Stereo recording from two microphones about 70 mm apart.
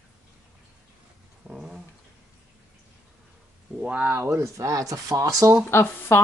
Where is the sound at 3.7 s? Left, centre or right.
Centre.